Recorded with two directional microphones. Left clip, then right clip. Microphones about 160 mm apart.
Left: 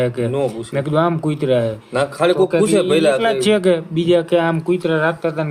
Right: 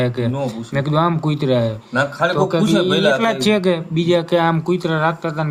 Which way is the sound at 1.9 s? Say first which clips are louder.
Left 2 dB; 85° left.